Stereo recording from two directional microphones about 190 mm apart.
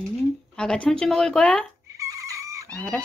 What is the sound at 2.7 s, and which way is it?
Speech, 5° left (ahead or behind).